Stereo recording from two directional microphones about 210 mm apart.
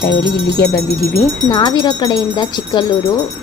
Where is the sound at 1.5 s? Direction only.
20° left (ahead or behind).